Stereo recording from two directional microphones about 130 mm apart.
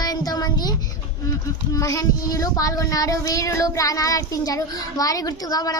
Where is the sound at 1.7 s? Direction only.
25° left (ahead or behind).